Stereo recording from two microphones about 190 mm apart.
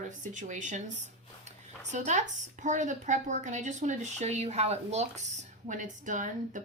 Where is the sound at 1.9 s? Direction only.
40° right (ahead or behind).